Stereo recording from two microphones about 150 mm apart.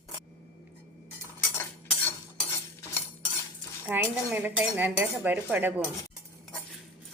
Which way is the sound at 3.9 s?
15° right (ahead or behind).